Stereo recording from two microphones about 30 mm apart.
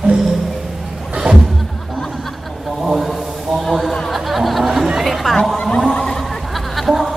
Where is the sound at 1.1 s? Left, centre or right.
Right.